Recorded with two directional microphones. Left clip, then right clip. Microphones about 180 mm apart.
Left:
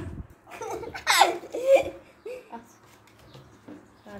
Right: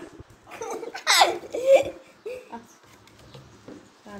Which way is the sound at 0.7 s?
20° left (ahead or behind).